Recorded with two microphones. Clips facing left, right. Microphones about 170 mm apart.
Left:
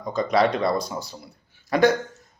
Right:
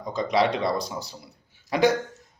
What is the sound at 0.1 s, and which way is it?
Speech, 50° left (ahead or behind).